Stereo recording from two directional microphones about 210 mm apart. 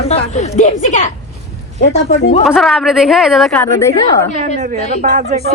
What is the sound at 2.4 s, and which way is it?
A woman's voice, centre (ahead or behind).